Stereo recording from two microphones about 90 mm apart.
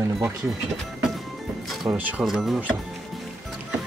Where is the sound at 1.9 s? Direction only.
45° right (ahead or behind).